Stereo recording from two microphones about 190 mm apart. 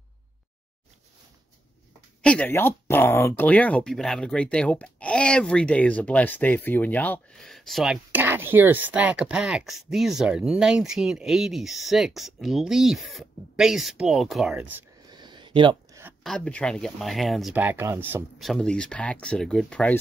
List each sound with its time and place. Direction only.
2.2 s speech: 5° left (ahead or behind); by 14.9 s 10° right (ahead or behind)
15.0 s a sound: 25° right (ahead or behind)
16.3 s speech: 5° left (ahead or behind); by 18.2 s 10° right (ahead or behind)
18.4 s speech: centre (ahead or behind)